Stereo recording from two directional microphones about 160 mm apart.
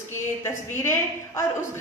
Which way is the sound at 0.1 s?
15° left (ahead or behind).